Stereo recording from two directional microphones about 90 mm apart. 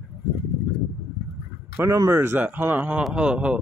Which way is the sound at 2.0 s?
25° right (ahead or behind).